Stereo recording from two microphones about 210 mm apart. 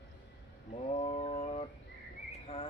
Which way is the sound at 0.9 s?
30° left (ahead or behind).